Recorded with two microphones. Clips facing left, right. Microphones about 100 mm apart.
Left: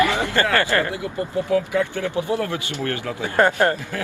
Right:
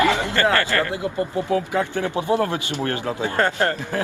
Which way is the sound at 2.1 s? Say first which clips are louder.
Right 3 dB; 20° right (ahead or behind).